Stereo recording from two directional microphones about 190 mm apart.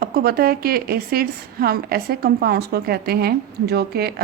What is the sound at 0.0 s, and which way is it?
A woman's voice, 50° right (ahead or behind).